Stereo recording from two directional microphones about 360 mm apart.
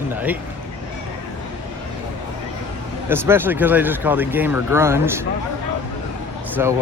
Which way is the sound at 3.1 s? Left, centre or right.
Centre.